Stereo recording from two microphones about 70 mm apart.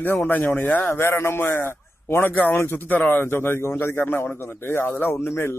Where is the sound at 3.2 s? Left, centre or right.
Left.